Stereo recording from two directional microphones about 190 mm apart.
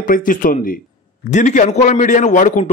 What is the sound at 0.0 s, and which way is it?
A man's voice, 45° left (ahead or behind).